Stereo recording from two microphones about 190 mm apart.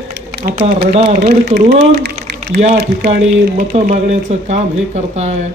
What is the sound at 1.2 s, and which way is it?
Speech, 55° right (ahead or behind).